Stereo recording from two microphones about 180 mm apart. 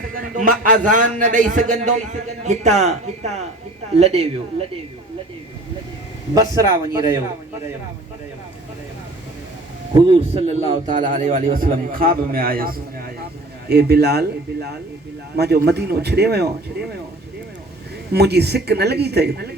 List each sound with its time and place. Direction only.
0.2 s a man's voice: 50° right (ahead or behind); by 4.3 s 35° right (ahead or behind)
6.3 s a man's voice: 20° right (ahead or behind)
10.1 s a man's voice: 35° right (ahead or behind); by 16.5 s 65° right (ahead or behind)
18.1 s speech: 65° right (ahead or behind)